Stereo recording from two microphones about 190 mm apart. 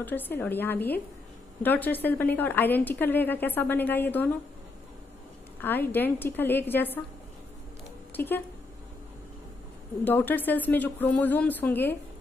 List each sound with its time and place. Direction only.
0.0 s a woman's voice: 10° left (ahead or behind)
5.6 s a woman's voice: 10° left (ahead or behind)
8.1 s speech: 10° left (ahead or behind)
10.0 s a woman's voice: 10° left (ahead or behind)